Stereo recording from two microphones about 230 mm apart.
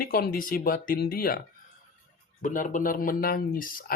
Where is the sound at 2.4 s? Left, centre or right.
Left.